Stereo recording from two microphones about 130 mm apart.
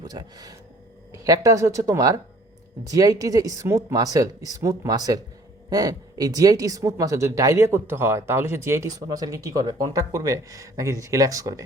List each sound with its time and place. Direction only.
0.0 s speech: 30° right (ahead or behind)